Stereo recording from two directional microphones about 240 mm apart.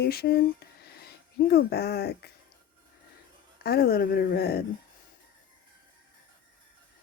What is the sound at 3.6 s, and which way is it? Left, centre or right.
Speech, left.